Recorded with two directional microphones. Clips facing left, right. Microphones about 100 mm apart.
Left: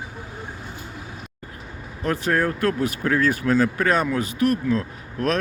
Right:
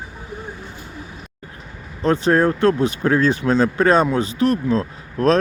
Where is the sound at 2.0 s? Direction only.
30° right (ahead or behind).